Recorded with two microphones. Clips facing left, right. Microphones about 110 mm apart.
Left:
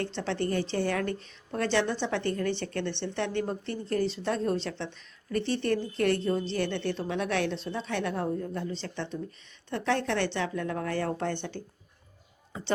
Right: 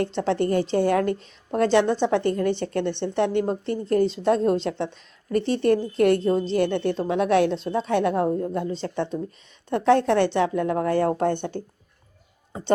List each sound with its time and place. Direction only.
0.4 s a woman's voice: 35° right (ahead or behind)
11.3 s speech: 50° right (ahead or behind)